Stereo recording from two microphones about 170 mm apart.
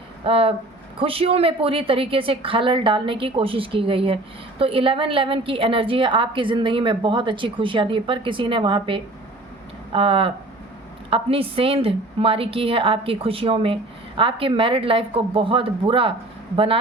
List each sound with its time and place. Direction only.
0.3 s a woman's voice: 35° right (ahead or behind)